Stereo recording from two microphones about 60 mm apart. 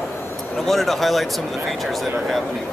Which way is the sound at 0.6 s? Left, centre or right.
Centre.